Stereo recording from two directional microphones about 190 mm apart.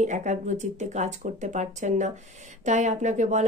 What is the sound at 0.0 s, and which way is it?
Speech, 40° right (ahead or behind).